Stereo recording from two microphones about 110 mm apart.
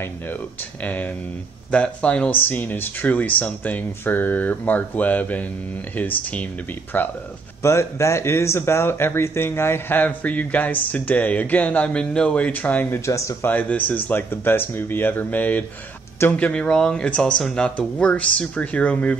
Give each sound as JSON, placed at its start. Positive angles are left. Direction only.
{"t": 0.0, "sound": "speech", "side_deg": 15}
{"t": 13.0, "sound": "speech", "side_deg": 25}